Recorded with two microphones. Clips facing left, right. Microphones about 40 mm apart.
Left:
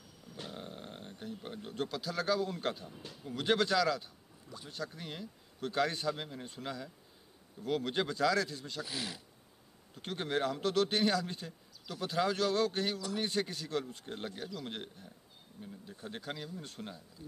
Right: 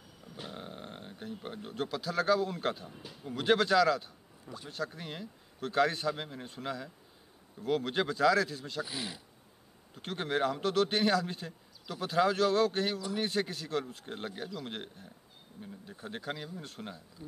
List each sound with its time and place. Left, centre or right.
0.4 s a man's voice: centre
8.8 s speech: centre
9.9 s a man's voice: centre